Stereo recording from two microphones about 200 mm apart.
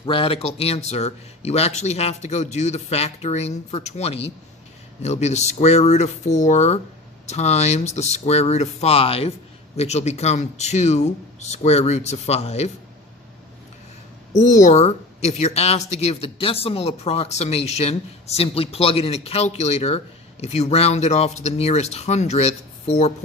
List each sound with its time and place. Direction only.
0.0 s speech: 25° left (ahead or behind)
14.3 s speech: 35° left (ahead or behind)